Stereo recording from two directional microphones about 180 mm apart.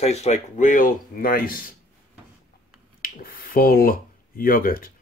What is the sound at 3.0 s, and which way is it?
Speech, 55° left (ahead or behind).